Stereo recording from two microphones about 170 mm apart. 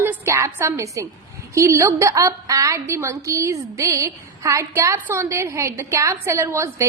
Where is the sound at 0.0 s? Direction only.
15° right (ahead or behind).